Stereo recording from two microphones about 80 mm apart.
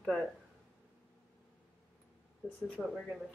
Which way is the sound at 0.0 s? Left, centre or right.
Centre.